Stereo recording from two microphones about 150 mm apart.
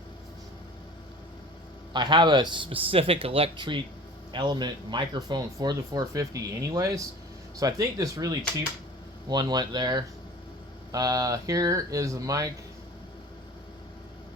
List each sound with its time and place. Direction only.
1.9 s a man's voice: 30° right (ahead or behind)